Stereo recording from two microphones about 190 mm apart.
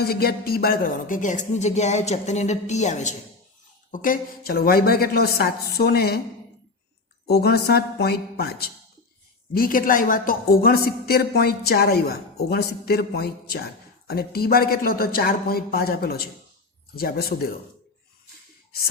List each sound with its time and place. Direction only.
0.0 s a woman's voice: 55° left (ahead or behind)
7.3 s a man's voice: 55° left (ahead or behind)